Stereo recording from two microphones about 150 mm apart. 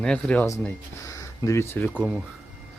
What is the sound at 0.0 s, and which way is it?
Speech, 5° left (ahead or behind).